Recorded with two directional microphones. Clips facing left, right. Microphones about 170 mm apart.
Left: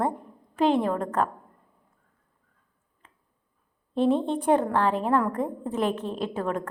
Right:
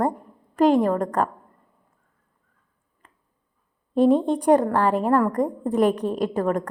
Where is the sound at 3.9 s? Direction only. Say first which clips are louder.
Right 5 dB; 45° right (ahead or behind).